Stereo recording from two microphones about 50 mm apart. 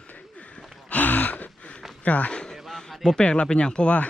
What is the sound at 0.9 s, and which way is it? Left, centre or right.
Gasp, left.